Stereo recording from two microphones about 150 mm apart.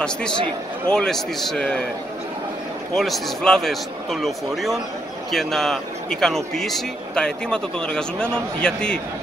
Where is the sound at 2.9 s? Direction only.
Centre (ahead or behind).